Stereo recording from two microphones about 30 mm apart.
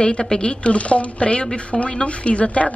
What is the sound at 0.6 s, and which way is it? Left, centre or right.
Speech, left.